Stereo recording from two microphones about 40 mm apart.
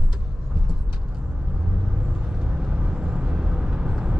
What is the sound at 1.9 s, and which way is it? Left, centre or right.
Vehicle, right.